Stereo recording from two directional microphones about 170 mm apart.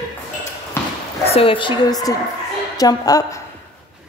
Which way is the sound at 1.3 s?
35° left (ahead or behind).